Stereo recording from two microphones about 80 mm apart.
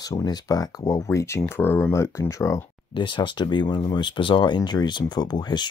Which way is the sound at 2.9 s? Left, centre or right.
Left.